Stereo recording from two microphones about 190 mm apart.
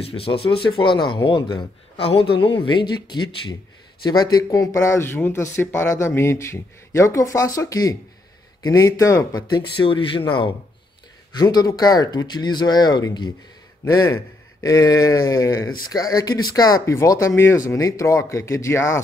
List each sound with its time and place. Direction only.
0.0 s a man's voice: 30° left (ahead or behind)
11.3 s a man's voice: 20° left (ahead or behind)